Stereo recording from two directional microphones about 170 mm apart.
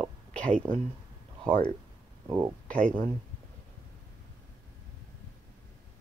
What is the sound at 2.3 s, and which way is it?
Speech, 15° right (ahead or behind).